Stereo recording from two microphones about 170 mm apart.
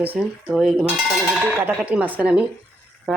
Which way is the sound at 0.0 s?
10° right (ahead or behind).